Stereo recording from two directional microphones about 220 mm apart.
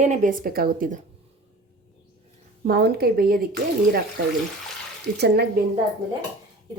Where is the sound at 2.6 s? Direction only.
45° right (ahead or behind).